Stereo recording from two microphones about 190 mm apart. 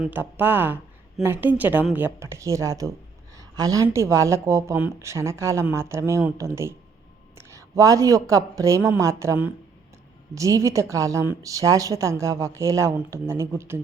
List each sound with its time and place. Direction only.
0.0 s a woman's voice: 10° right (ahead or behind)